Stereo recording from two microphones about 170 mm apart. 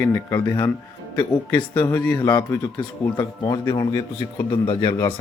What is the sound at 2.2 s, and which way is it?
Speech, 25° left (ahead or behind).